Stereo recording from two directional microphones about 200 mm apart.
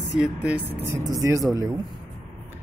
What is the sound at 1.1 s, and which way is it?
Speech, 15° right (ahead or behind).